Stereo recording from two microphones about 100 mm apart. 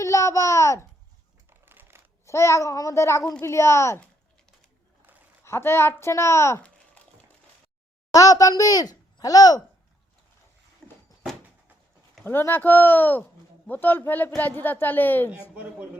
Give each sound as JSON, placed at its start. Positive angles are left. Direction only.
{"t": 0.0, "sound": "a child's voice", "side_deg": 30}
{"t": 1.5, "sound": "a sound", "side_deg": -20}
{"t": 2.2, "sound": "speech", "side_deg": 30}
{"t": 5.4, "sound": "speech", "side_deg": 25}
{"t": 8.1, "sound": "speech", "side_deg": 35}
{"t": 10.8, "sound": "a sound", "side_deg": 20}
{"t": 12.2, "sound": "speech", "side_deg": 20}